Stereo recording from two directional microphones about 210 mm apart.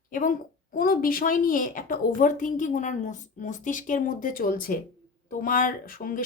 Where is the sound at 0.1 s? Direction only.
40° left (ahead or behind).